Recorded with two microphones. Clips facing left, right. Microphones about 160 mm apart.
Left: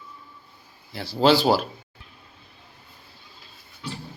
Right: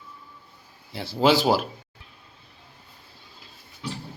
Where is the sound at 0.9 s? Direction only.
20° right (ahead or behind).